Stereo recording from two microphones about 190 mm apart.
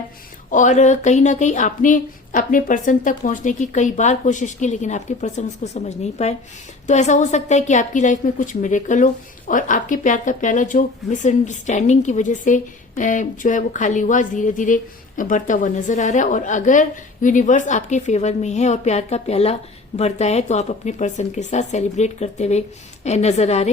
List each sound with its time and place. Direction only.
0.5 s speech: 40° left (ahead or behind)